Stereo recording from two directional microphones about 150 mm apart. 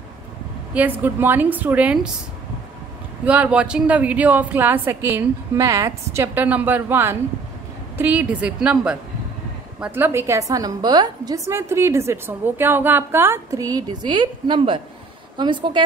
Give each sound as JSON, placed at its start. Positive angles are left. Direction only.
{"t": 0.7, "sound": "a woman's voice", "side_deg": -10}
{"t": 3.3, "sound": "a woman's voice", "side_deg": -10}